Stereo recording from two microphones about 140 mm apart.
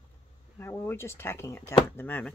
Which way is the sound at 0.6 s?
15° left (ahead or behind).